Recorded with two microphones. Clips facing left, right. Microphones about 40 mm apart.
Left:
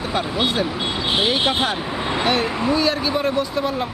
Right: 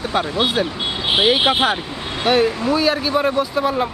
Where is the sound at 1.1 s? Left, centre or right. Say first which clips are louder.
Right 5 dB; right.